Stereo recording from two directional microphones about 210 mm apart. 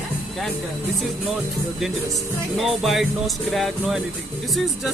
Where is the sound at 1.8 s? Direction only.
Centre (ahead or behind).